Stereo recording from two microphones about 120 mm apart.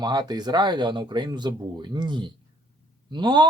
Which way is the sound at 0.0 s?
35° right (ahead or behind).